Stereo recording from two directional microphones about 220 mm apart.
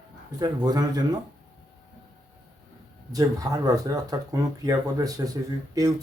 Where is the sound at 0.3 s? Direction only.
15° right (ahead or behind).